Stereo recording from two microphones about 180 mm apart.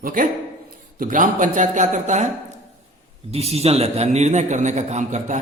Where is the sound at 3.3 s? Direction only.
35° right (ahead or behind).